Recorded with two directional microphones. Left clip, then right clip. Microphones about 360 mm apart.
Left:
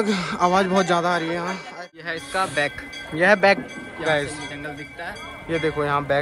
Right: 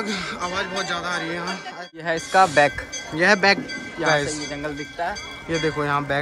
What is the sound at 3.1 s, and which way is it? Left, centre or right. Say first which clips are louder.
A man's voice: left 1 dB; centre.